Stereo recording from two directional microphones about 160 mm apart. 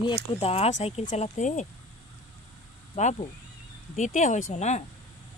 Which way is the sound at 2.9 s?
45° left (ahead or behind).